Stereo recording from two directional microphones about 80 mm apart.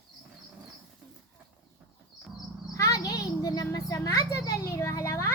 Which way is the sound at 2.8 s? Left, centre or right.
Left.